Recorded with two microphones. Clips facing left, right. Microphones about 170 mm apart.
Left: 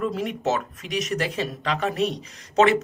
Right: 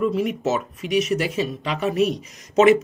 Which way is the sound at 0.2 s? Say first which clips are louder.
Right 3 dB; 5° right (ahead or behind).